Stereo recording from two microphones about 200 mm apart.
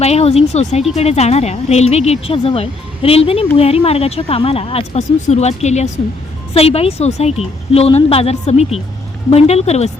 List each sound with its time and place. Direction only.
0.0 s speech: 30° left (ahead or behind)